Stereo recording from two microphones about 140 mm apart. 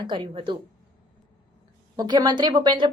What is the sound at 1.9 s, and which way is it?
Speech, 30° right (ahead or behind).